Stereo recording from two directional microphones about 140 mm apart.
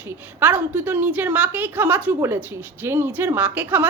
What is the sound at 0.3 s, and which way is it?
A woman's voice, 15° right (ahead or behind).